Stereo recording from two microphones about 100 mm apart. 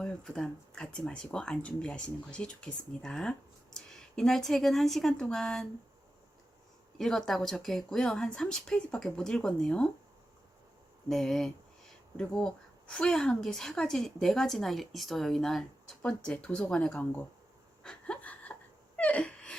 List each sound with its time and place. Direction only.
0.0 s speech: 5° left (ahead or behind)
7.0 s a woman's voice: 5° left (ahead or behind)
11.1 s a woman's voice: 5° left (ahead or behind)
17.8 s a sound: 10° left (ahead or behind)